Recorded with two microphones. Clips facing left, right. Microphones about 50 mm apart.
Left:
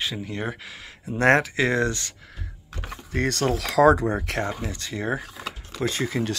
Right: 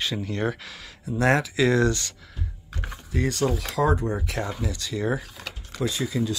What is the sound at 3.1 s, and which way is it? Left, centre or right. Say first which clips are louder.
Speech: left 1 dB; left.